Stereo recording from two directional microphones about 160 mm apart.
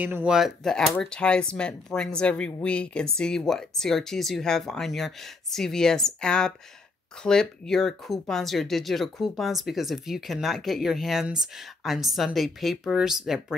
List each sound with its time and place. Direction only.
0.0 s speech: 10° right (ahead or behind)